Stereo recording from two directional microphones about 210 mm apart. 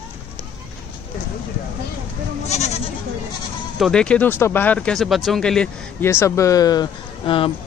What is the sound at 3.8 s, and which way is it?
Speech, 5° left (ahead or behind).